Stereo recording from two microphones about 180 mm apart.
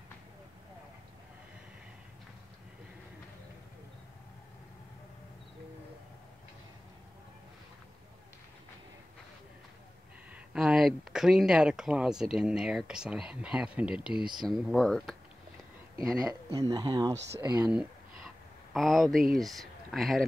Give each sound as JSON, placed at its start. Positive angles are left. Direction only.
{"t": 10.3, "sound": "speech", "side_deg": -5}
{"t": 16.5, "sound": "speech", "side_deg": -20}
{"t": 17.6, "sound": "a sound", "side_deg": -5}
{"t": 19.3, "sound": "speech", "side_deg": 0}